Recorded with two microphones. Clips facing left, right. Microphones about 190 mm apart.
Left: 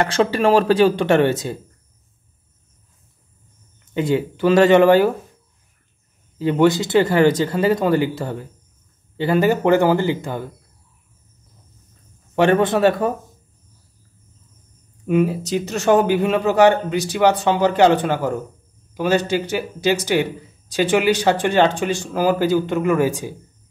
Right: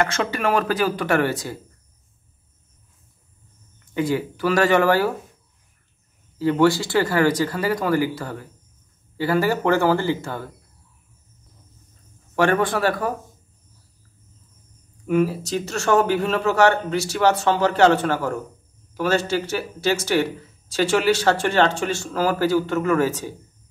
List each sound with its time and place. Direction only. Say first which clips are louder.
0.0 s speech: left 5 dB; 30° left (ahead or behind)
3.8 s speech: left 3 dB; 25° left (ahead or behind)
6.3 s speech: left 2 dB; 20° left (ahead or behind)
12.4 s speech: left 4 dB; 20° left (ahead or behind)
15.0 s speech: left 2 dB; 20° left (ahead or behind)